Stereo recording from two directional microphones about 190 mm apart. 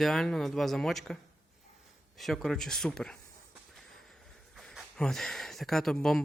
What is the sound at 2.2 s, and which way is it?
Speech, centre (ahead or behind).